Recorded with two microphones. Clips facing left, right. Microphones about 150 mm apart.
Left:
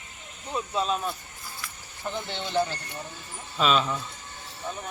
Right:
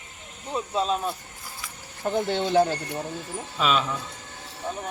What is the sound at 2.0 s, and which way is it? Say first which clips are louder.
Speech: right 8 dB; 45° right (ahead or behind).